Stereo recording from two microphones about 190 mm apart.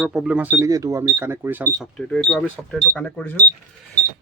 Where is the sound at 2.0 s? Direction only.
5° left (ahead or behind).